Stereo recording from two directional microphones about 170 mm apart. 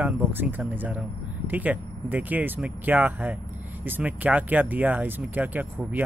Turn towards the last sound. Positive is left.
turn(degrees=-10)  # may be behind; listen again after turning